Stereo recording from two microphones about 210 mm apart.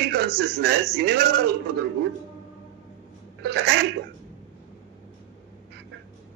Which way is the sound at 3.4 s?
55° right (ahead or behind).